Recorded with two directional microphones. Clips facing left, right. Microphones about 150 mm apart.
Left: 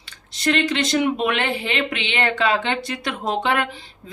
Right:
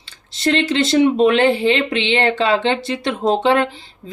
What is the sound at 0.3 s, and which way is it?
A woman's voice, 25° right (ahead or behind).